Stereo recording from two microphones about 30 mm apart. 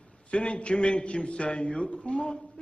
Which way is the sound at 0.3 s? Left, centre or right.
Left.